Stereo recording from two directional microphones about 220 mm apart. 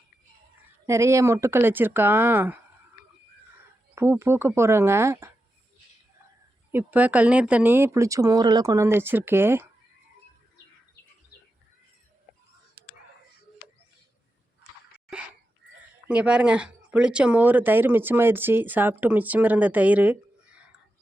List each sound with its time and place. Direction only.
0.9 s speech: 15° right (ahead or behind)
3.9 s speech: 10° right (ahead or behind)
6.7 s speech: 10° right (ahead or behind)
12.8 s a sound: 45° right (ahead or behind)
16.0 s speech: 5° right (ahead or behind)